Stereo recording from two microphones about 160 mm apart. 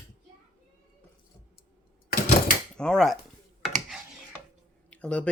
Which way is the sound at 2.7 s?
5° left (ahead or behind).